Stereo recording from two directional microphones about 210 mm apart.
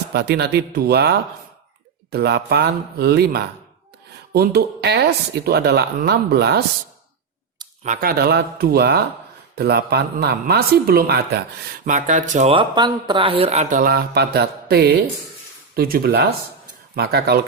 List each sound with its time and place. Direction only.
0.1 s speech: 50° right (ahead or behind)
7.9 s speech: 45° right (ahead or behind)
11.9 s speech: 35° right (ahead or behind)